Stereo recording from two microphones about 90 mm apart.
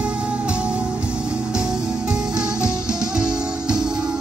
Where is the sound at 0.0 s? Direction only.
10° right (ahead or behind).